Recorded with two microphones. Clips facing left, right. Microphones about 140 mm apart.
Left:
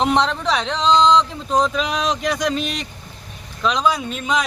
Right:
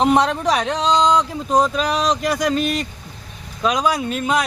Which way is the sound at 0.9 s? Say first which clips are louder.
Left 2 dB; 40° right (ahead or behind).